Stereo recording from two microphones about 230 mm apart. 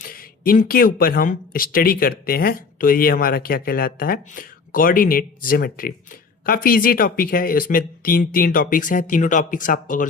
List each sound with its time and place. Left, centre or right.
0.0 s speech: left